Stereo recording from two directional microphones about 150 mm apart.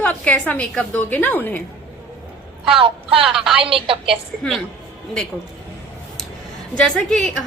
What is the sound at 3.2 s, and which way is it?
Speech, 5° right (ahead or behind).